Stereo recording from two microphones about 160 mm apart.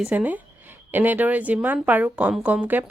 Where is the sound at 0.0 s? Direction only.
10° right (ahead or behind).